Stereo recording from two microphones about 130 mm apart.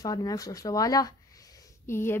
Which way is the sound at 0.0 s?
30° left (ahead or behind).